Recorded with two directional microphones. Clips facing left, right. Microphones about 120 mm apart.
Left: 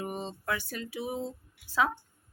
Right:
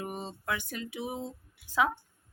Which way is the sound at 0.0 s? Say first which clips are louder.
Left 2 dB; 5° right (ahead or behind).